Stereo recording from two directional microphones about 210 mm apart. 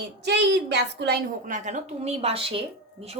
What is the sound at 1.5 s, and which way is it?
A woman's voice, 35° right (ahead or behind).